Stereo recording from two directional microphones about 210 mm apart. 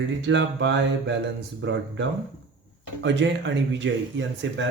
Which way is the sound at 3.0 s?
60° right (ahead or behind).